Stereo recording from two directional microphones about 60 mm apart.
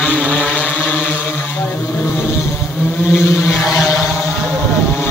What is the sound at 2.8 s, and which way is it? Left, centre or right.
Vehicle, centre.